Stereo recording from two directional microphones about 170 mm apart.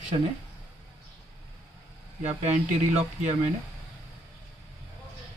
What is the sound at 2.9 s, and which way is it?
Speech, 40° right (ahead or behind).